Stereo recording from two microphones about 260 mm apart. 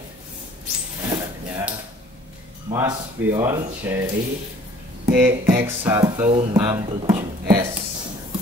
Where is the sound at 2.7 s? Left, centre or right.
Centre.